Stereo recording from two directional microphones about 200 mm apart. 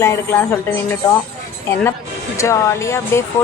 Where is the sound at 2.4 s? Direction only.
15° left (ahead or behind).